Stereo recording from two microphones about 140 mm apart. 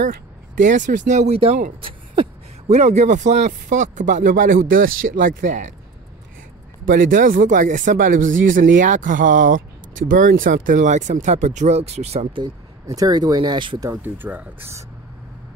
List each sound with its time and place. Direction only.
0.0 s speech: 65° right (ahead or behind); by 1.6 s 50° right (ahead or behind)
1.8 s a sound: 40° right (ahead or behind)
2.7 s speech: 50° right (ahead or behind)
6.9 s speech: 75° right (ahead or behind); by 12.4 s 45° right (ahead or behind)
12.8 s speech: 25° right (ahead or behind)
13.8 s speech: 15° right (ahead or behind)